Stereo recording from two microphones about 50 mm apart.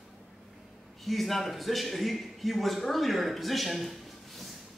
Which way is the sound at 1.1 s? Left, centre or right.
Centre.